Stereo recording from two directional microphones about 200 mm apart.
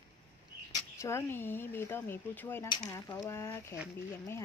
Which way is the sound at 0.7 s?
15° left (ahead or behind).